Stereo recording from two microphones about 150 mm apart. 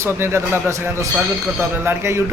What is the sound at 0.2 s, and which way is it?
Speech, 15° right (ahead or behind).